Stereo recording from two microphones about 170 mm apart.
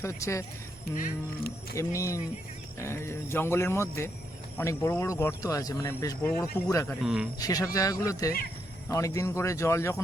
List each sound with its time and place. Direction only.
0.0 s speech: 15° left (ahead or behind)
0.9 s speech: 50° left (ahead or behind)
1.7 s speech: 15° left (ahead or behind)
7.0 s a man's voice: 5° right (ahead or behind)
7.3 s speech: 20° left (ahead or behind)